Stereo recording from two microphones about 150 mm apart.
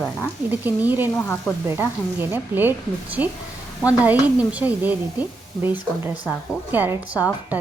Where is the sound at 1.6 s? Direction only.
15° right (ahead or behind).